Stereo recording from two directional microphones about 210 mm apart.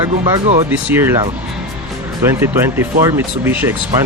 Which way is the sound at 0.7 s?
10° right (ahead or behind).